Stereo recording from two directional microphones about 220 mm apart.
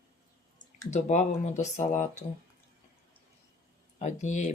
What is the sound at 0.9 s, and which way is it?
Speech, 30° left (ahead or behind).